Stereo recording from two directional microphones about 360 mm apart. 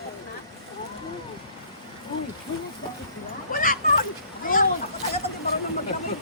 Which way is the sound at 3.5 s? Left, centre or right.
Left.